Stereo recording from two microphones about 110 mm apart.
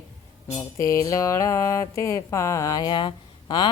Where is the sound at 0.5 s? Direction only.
25° left (ahead or behind); by 3.1 s 45° left (ahead or behind).